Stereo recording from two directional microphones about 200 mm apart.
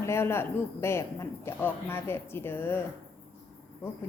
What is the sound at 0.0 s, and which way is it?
A man's voice, 10° left (ahead or behind).